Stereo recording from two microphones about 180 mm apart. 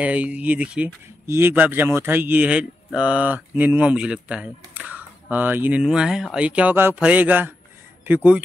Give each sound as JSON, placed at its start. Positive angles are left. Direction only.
{"t": 0.0, "sound": "speech", "side_deg": -10}